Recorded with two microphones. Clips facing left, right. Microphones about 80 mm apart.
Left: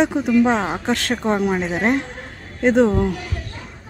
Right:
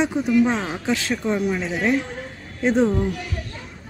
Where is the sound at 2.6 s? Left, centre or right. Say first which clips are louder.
Left 4 dB; left.